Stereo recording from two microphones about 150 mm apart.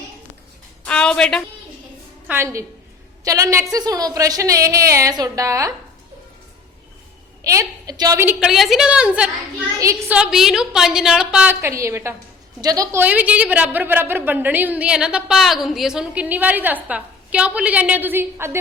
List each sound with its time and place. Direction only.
0.9 s music: 5° left (ahead or behind)
2.2 s a woman's voice: 15° right (ahead or behind)
7.4 s a woman's voice: 25° right (ahead or behind); by 11.5 s 5° right (ahead or behind)
11.6 s a woman's voice: 20° right (ahead or behind)
13.0 s a woman's voice: 10° right (ahead or behind)